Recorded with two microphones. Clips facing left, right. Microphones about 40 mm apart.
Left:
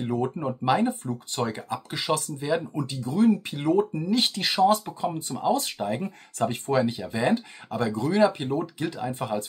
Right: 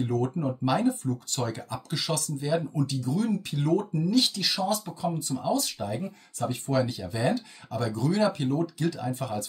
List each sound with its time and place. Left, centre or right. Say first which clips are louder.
0.0 s speech: left 1 dB; left
6.7 s speech: left 1 dB; left